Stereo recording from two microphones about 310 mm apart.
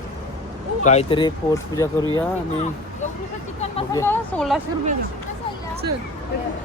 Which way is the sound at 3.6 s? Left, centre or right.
Centre.